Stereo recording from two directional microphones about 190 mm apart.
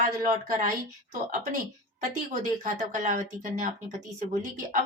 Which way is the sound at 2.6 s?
40° right (ahead or behind).